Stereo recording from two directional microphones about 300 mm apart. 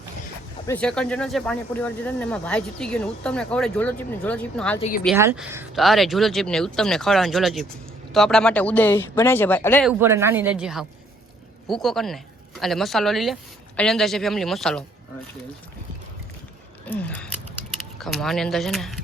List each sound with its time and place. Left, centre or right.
0.7 s speech: centre
4.8 s speech: left
5.0 s speech: centre
10.0 s speech: centre
16.8 s speech: centre